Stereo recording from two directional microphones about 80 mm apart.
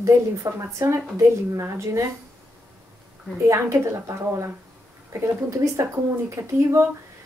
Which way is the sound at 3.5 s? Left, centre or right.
Right.